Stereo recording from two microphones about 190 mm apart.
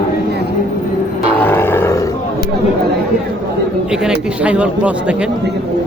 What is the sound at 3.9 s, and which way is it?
Speech, 5° right (ahead or behind).